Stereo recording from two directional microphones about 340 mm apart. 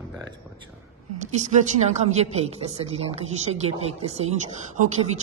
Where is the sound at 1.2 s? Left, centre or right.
Right.